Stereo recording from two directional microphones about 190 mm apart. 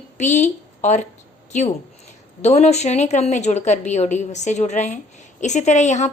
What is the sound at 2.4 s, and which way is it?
A woman's voice, 35° left (ahead or behind).